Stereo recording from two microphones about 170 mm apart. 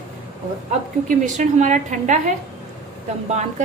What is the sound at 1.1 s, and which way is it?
A woman's voice, 45° right (ahead or behind).